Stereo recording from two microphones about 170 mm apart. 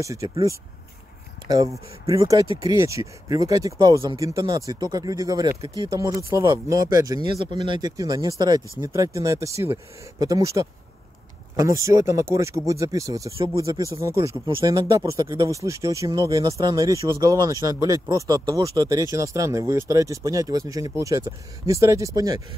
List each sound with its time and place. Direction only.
0.0 s speech: 20° right (ahead or behind)